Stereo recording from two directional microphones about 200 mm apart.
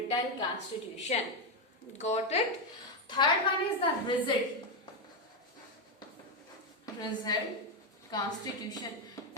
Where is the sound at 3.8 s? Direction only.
25° left (ahead or behind).